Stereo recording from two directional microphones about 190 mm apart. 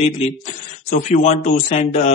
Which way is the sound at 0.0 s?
40° left (ahead or behind).